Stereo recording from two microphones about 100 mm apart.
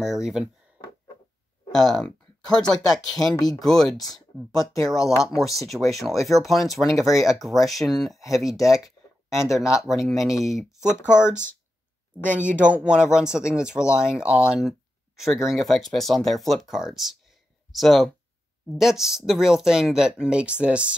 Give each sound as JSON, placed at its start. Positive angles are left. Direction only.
{"t": 0.0, "sound": "speech", "side_deg": -5}
{"t": 1.7, "sound": "speech", "side_deg": 5}
{"t": 3.3, "sound": "speech", "side_deg": 40}
{"t": 3.6, "sound": "speech", "side_deg": 5}